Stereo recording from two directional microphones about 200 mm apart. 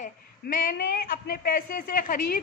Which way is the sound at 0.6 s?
45° left (ahead or behind).